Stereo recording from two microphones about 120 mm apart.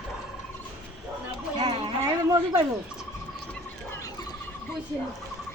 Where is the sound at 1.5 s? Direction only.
40° right (ahead or behind).